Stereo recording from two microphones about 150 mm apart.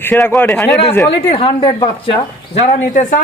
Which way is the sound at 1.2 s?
35° left (ahead or behind).